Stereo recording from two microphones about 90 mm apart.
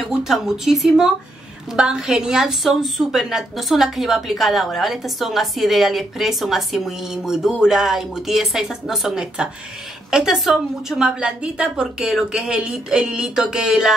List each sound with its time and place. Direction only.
0.2 s a woman's voice: 5° right (ahead or behind)